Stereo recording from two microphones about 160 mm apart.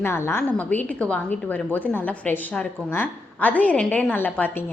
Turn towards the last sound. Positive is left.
turn(degrees=10)  # may be behind; listen again after turning